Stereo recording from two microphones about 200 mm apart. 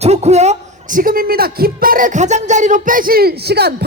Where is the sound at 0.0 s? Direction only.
30° right (ahead or behind).